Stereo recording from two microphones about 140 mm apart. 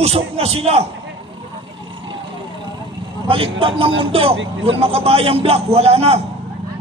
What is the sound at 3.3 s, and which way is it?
A man's voice, 40° right (ahead or behind).